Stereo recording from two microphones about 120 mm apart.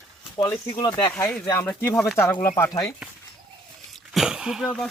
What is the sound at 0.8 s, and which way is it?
Speech, 35° left (ahead or behind).